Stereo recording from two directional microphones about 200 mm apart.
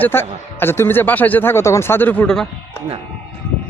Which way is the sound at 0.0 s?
10° left (ahead or behind).